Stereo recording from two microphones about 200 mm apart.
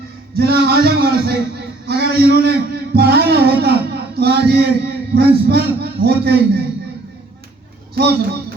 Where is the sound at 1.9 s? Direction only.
50° right (ahead or behind).